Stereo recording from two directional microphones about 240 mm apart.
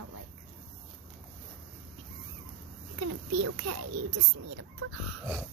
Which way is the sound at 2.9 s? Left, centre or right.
Right.